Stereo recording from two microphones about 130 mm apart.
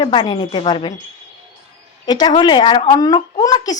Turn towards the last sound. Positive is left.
turn(degrees=30)  # may be behind; listen again after turning